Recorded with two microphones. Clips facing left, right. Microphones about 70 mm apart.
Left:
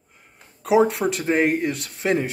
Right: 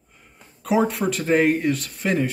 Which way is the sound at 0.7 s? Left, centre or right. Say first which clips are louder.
Left 3 dB; centre.